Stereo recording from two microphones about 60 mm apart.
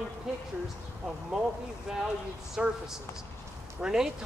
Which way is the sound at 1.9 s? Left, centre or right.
Centre.